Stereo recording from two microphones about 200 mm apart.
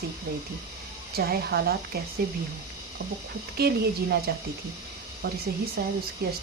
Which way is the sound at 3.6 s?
50° right (ahead or behind).